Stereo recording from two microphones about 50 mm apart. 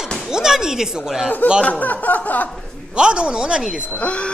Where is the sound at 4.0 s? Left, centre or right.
Left.